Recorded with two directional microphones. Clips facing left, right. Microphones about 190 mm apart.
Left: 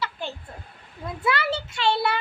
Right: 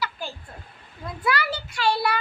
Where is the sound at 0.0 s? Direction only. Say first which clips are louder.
Even; 25° left (ahead or behind).